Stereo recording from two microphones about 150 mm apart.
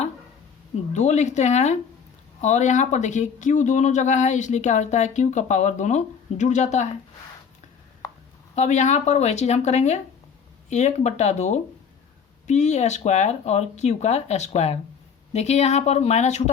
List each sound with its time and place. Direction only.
0.9 s speech: 50° left (ahead or behind)
8.5 s speech: 50° left (ahead or behind)